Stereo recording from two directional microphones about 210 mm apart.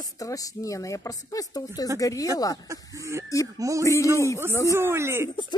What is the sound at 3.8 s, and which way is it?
Speech, 15° left (ahead or behind).